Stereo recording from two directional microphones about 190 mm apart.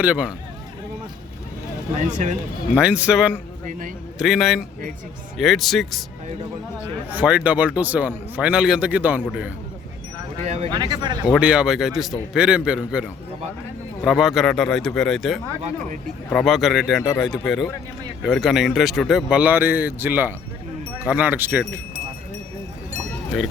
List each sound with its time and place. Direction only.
0.0 s speech: 5° right (ahead or behind)
2.0 s speech: 40° right (ahead or behind)
2.7 s speech: 5° right (ahead or behind)
3.7 s a man's voice: 45° right (ahead or behind)
4.2 s speech: centre (ahead or behind)
7.1 s speech: 5° right (ahead or behind)
10.4 s speech: 35° right (ahead or behind)
10.8 s speech: 20° right (ahead or behind)
11.3 s speech: 5° right (ahead or behind)